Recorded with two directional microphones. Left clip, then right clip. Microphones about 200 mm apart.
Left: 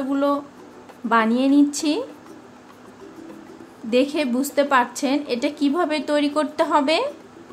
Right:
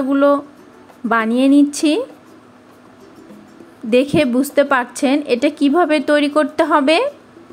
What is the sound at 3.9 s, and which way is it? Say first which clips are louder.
A woman's voice: right 6 dB; 25° right (ahead or behind).